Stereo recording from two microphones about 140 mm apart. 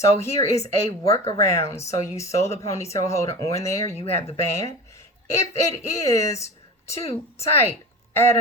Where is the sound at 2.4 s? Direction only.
50° left (ahead or behind).